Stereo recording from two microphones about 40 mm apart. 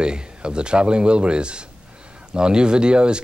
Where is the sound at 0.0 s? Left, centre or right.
Right.